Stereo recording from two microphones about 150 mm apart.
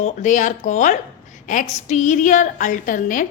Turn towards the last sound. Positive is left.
turn(degrees=60)  # may be behind; listen again after turning